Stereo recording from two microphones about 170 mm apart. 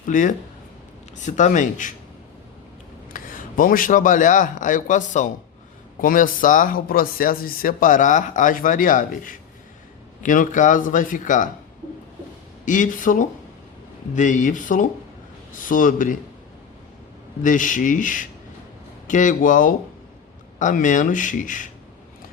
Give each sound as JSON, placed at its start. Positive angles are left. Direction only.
{"t": 0.1, "sound": "speech", "side_deg": 50}
{"t": 3.1, "sound": "a man's voice", "side_deg": 55}
{"t": 12.6, "sound": "speech", "side_deg": 50}
{"t": 17.4, "sound": "speech", "side_deg": 50}